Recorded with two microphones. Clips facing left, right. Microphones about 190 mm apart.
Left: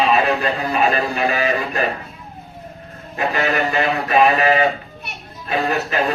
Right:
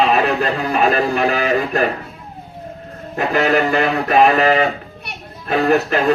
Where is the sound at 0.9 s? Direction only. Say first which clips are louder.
Right 3 dB; 55° right (ahead or behind).